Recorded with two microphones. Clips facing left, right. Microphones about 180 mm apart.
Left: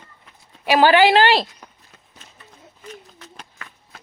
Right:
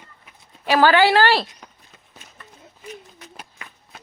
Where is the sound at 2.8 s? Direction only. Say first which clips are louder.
Right 1 dB; 10° right (ahead or behind).